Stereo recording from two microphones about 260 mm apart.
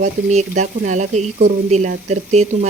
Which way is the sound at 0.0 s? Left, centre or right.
Right.